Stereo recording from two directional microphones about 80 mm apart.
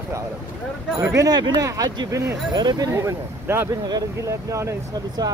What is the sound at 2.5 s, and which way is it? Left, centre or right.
Speech, right.